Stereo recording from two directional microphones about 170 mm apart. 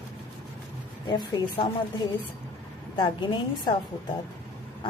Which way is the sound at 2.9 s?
25° left (ahead or behind).